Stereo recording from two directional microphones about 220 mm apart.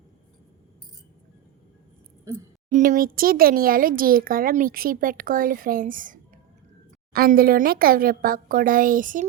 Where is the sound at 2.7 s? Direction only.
35° right (ahead or behind).